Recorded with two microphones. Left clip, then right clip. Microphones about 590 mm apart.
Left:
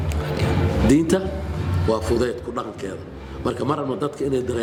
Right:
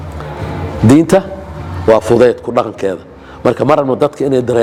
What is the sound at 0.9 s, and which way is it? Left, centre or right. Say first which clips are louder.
A man's voice: right 10 dB; right.